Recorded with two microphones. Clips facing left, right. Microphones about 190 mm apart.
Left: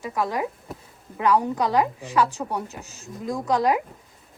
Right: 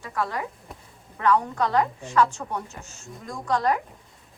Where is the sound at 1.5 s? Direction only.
10° left (ahead or behind).